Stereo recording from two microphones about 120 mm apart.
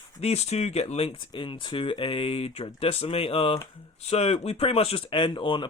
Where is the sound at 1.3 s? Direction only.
45° left (ahead or behind).